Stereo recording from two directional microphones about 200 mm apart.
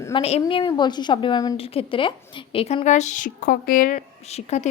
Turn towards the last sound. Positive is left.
turn(degrees=35)  # may be behind; listen again after turning